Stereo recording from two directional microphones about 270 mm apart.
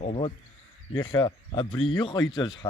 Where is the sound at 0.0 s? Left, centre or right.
Left.